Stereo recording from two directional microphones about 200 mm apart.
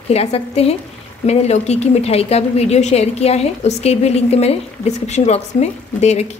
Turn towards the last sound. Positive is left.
turn(degrees=35)  # may be behind; listen again after turning